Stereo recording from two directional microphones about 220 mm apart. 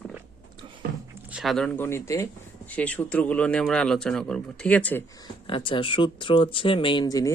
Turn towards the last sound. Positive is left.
turn(degrees=15)  # may be behind; listen again after turning